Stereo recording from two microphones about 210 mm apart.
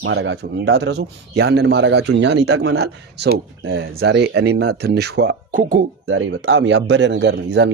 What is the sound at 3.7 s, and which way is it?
Speech, 65° right (ahead or behind).